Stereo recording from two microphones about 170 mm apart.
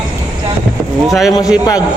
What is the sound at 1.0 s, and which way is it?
Speech, centre (ahead or behind).